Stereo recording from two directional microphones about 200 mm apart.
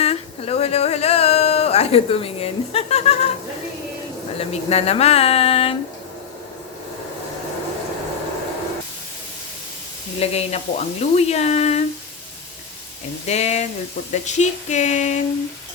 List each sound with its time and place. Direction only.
0.0 s a sound: 30° left (ahead or behind)
4.4 s speech: 30° left (ahead or behind)
10.2 s speech: 30° left (ahead or behind)
13.2 s speech: 35° left (ahead or behind)